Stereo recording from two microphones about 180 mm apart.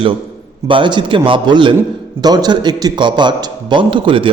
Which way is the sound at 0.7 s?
25° right (ahead or behind).